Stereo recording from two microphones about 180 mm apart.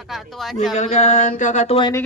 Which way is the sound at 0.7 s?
40° left (ahead or behind).